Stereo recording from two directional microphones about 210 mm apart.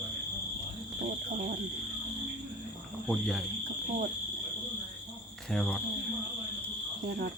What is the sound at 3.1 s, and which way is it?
Speech, centre (ahead or behind).